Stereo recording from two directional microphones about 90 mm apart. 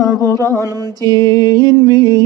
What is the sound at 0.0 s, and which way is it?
Mantra, 35° left (ahead or behind).